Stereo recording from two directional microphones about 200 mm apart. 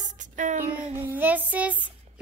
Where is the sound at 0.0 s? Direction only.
40° right (ahead or behind).